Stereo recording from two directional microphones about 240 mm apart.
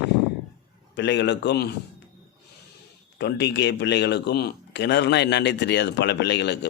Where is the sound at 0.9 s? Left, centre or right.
Left.